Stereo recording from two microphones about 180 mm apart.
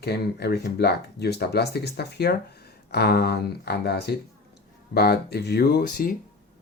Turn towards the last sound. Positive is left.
turn(degrees=60)  # may be behind; listen again after turning